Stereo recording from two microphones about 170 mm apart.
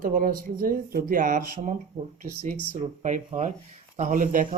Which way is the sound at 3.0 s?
45° right (ahead or behind).